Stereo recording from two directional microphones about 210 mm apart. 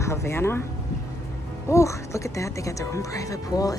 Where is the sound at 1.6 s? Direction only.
15° left (ahead or behind).